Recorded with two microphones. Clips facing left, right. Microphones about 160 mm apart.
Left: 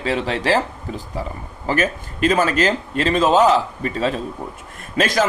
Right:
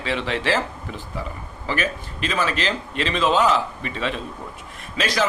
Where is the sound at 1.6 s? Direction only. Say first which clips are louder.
Left 5 dB; 45° left (ahead or behind).